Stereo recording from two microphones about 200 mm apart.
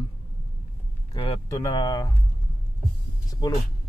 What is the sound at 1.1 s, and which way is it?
Speech, 20° left (ahead or behind).